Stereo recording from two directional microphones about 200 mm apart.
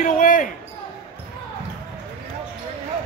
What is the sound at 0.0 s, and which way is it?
Basketball bounce, 40° left (ahead or behind).